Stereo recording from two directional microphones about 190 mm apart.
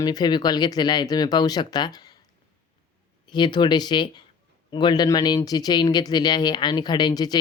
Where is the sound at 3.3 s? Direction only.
25° left (ahead or behind).